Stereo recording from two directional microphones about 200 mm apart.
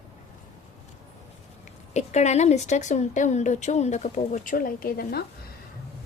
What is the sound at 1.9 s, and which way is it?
A woman's voice, 35° left (ahead or behind).